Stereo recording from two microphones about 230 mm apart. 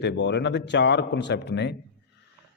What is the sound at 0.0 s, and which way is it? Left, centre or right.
A man's voice, left.